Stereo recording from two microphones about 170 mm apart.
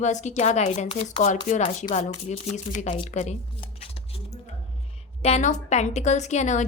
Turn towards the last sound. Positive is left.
turn(degrees=45)  # may be behind; listen again after turning